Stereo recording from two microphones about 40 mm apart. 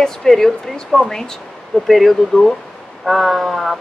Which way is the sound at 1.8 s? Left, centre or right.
Centre.